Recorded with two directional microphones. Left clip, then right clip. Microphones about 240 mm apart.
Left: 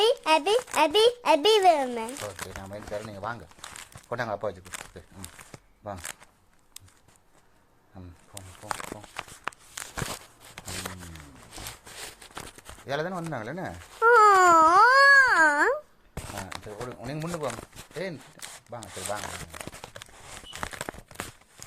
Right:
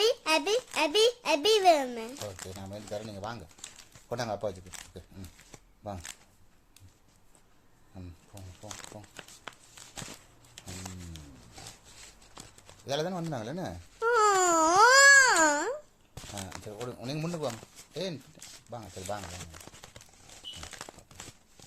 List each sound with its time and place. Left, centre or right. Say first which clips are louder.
0.0 s a child's voice: left 4 dB; centre
8.6 s a sound: left 11 dB; centre
9.1 s walk: left 10 dB; left
12.8 s speech: left 2 dB; centre
14.0 s babbling: left 8 dB; centre
17.0 s speech: left 2 dB; centre
18.7 s speech: left 4 dB; centre